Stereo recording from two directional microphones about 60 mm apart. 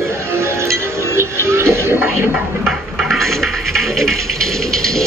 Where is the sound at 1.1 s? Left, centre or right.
Right.